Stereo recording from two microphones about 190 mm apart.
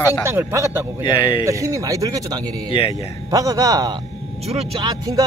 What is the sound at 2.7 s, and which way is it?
Speech, 25° left (ahead or behind).